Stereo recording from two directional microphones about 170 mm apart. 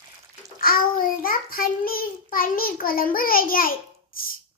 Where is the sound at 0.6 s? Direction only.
55° left (ahead or behind).